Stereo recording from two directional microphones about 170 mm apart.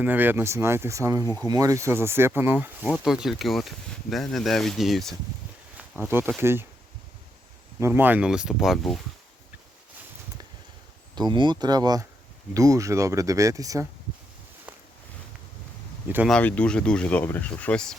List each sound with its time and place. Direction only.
0.0 s speech: 10° right (ahead or behind)
1.2 s speech: 15° left (ahead or behind)
1.5 s speech: 20° right (ahead or behind); by 5.1 s centre (ahead or behind)
6.1 s speech: 15° right (ahead or behind)
7.8 s speech: 15° right (ahead or behind)
11.1 s speech: 25° right (ahead or behind)
16.3 s speech: 10° left (ahead or behind)